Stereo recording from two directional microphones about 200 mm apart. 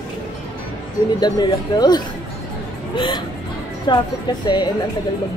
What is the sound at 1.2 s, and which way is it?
Speech, 20° left (ahead or behind).